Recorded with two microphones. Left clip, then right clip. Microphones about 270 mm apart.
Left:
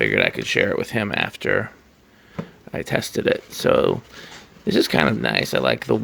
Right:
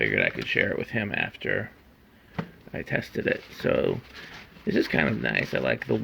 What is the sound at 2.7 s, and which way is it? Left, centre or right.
Speech, centre.